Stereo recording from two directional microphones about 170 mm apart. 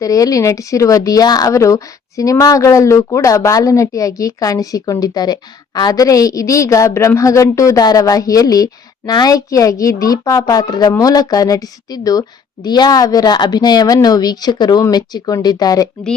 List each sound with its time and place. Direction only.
0.0 s speech: 20° left (ahead or behind)